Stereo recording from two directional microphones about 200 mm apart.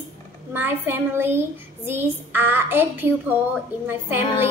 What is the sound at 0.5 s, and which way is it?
Child singing, 10° right (ahead or behind).